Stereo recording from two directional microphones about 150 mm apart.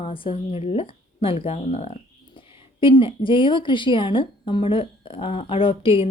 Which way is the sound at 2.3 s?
35° left (ahead or behind).